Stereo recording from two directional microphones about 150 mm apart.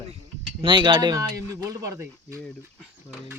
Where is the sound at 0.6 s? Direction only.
30° right (ahead or behind).